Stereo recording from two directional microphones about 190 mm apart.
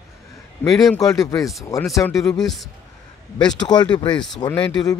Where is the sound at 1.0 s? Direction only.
20° left (ahead or behind).